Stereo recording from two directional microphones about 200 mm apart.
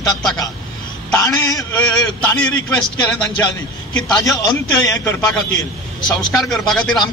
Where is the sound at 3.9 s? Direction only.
15° left (ahead or behind).